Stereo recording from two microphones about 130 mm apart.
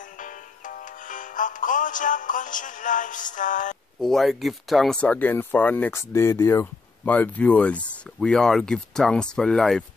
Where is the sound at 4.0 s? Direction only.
Centre (ahead or behind).